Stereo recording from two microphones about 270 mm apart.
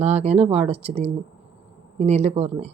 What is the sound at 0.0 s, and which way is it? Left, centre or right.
A woman's voice, right.